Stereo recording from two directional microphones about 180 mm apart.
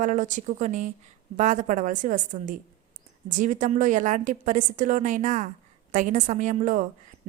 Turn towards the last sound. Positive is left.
turn(degrees=-45)  # may be behind; listen again after turning